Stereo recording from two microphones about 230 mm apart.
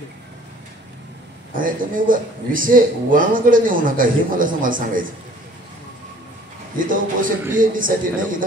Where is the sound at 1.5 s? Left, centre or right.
Right.